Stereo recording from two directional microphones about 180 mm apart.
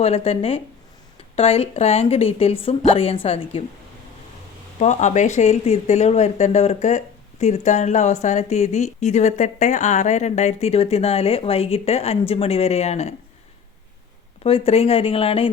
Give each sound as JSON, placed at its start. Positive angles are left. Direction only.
{"t": 0.0, "sound": "speech", "side_deg": 35}
{"t": 4.8, "sound": "speech", "side_deg": 40}
{"t": 14.4, "sound": "speech", "side_deg": 30}